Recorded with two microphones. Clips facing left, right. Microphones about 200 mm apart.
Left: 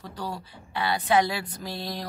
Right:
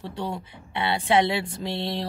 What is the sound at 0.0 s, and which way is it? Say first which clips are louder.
Speech: right 4 dB; 25° right (ahead or behind).